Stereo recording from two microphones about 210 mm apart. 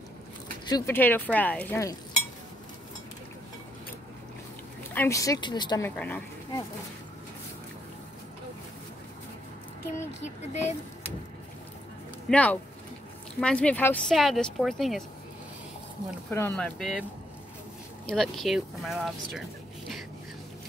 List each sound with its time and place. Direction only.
0.7 s speech: 15° left (ahead or behind)
4.9 s speech: 15° left (ahead or behind)
5.9 s speech: 10° left (ahead or behind)
10.2 s speech: 35° left (ahead or behind)
12.3 s speech: 5° left (ahead or behind)
16.3 s speech: 10° left (ahead or behind)
18.0 s speech: centre (ahead or behind)